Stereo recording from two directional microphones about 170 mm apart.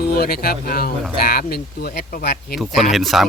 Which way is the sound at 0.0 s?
65° left (ahead or behind).